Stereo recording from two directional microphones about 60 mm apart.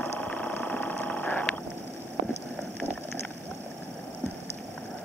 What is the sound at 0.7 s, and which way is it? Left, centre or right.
Vehicle, left.